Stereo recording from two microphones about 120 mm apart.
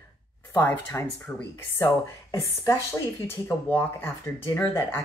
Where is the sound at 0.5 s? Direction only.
20° left (ahead or behind).